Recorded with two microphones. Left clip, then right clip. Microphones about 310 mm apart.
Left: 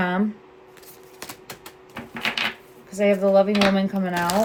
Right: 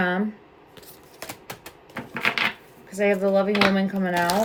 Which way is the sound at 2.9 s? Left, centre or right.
Centre.